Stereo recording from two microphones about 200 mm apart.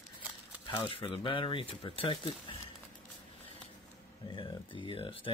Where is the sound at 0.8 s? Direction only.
30° left (ahead or behind).